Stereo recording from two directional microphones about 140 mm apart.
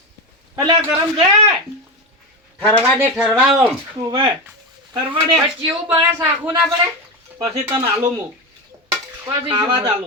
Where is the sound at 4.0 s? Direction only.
30° right (ahead or behind).